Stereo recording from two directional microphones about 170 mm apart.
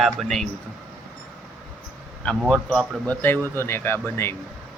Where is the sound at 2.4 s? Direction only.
Centre (ahead or behind).